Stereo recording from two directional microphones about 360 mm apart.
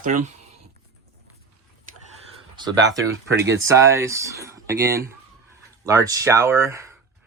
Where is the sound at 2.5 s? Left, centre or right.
Centre.